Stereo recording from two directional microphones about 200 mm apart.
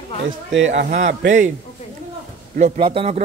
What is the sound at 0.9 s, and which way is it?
Speech, 35° right (ahead or behind).